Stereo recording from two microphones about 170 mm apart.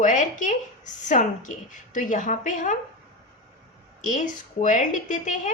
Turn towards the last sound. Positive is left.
turn(degrees=45)  # may be behind; listen again after turning